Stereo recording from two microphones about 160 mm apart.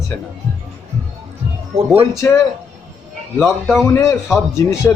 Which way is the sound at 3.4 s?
Centre (ahead or behind).